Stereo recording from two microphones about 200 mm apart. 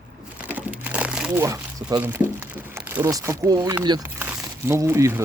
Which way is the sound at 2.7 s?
10° right (ahead or behind).